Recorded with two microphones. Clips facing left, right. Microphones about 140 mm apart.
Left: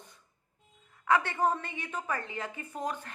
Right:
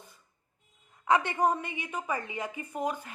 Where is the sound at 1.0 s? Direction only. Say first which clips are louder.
Right 2 dB; 20° right (ahead or behind).